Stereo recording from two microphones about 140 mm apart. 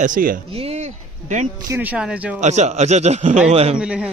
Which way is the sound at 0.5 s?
45° right (ahead or behind).